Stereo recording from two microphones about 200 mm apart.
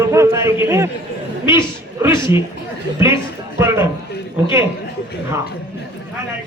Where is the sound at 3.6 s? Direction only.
15° right (ahead or behind).